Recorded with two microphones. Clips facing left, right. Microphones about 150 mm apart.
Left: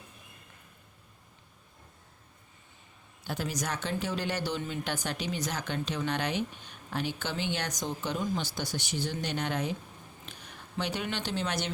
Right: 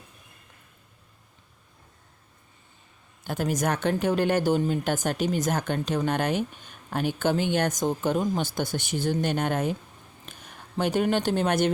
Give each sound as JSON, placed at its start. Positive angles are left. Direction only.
{"t": 3.2, "sound": "speech", "side_deg": -50}